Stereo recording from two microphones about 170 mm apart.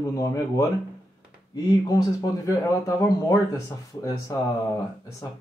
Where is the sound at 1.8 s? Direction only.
20° left (ahead or behind).